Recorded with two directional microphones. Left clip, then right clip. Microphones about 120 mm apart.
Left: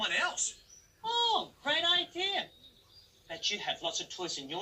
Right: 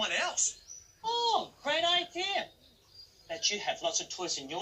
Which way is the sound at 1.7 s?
30° right (ahead or behind).